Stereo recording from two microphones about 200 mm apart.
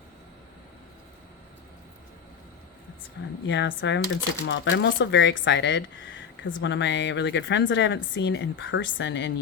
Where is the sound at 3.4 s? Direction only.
65° left (ahead or behind).